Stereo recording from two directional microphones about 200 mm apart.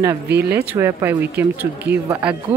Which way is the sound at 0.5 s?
10° right (ahead or behind).